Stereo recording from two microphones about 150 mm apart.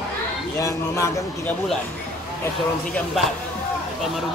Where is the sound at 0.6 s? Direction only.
20° left (ahead or behind).